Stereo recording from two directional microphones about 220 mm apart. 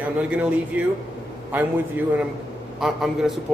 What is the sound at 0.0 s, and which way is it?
Speech, 5° right (ahead or behind).